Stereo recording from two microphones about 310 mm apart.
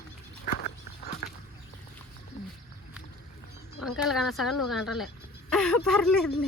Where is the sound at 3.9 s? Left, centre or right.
Centre.